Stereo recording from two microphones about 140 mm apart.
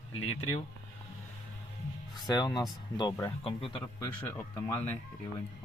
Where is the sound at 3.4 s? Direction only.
40° left (ahead or behind).